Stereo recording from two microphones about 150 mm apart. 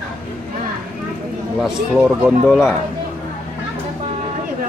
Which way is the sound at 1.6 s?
5° right (ahead or behind).